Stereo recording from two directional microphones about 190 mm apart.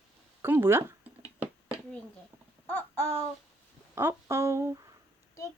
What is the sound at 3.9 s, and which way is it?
Speech, 15° right (ahead or behind).